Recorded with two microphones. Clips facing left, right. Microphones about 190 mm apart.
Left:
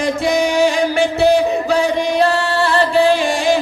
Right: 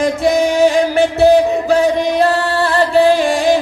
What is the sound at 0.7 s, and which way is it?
Music, 55° right (ahead or behind).